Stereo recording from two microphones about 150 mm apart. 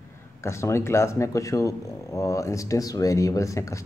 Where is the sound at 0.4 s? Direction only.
20° left (ahead or behind).